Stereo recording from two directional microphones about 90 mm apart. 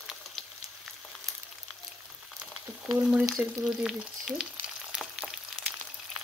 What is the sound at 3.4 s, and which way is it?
Frying, centre (ahead or behind).